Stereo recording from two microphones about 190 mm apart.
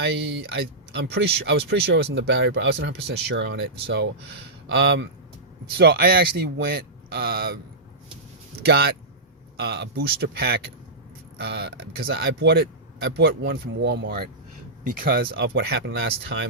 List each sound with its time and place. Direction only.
0.0 s speech: 65° right (ahead or behind)
5.8 s speech: 55° right (ahead or behind)
8.6 s speech: 55° right (ahead or behind)